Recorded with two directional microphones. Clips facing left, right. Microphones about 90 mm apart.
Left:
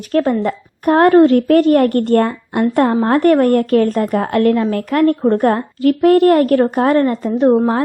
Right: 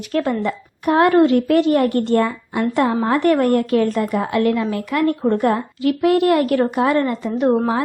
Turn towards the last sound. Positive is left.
turn(degrees=35)  # may be behind; listen again after turning